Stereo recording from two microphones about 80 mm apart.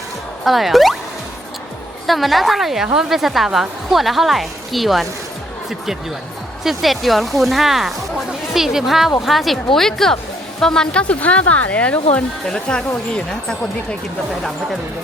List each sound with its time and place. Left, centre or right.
0.4 s a woman's voice: centre
2.0 s a woman's voice: centre
6.7 s a woman's voice: centre